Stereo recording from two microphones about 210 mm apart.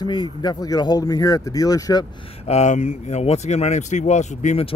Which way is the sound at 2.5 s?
30° left (ahead or behind).